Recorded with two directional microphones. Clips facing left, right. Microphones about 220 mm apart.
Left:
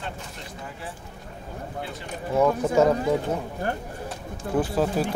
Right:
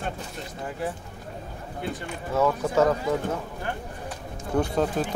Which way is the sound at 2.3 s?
15° left (ahead or behind).